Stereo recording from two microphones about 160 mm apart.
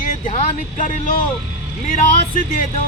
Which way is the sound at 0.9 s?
55° left (ahead or behind).